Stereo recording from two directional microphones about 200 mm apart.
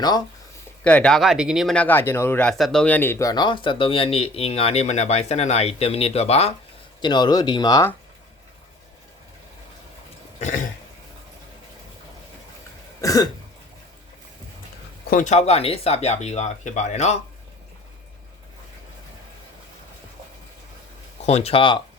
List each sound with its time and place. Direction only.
0.9 s speech: 5° left (ahead or behind)
13.0 s cough: 15° left (ahead or behind)
15.1 s speech: 35° left (ahead or behind)
21.2 s speech: 30° left (ahead or behind)